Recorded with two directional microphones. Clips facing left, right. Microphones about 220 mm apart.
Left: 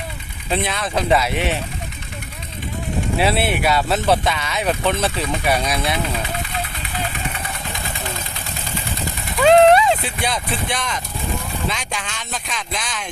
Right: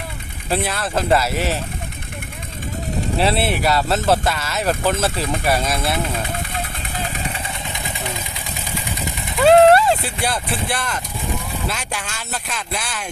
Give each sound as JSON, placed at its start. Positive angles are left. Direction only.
{"t": 0.5, "sound": "speech", "side_deg": -5}
{"t": 3.2, "sound": "speech", "side_deg": 0}
{"t": 7.5, "sound": "vehicle", "side_deg": -20}
{"t": 9.4, "sound": "speech", "side_deg": -5}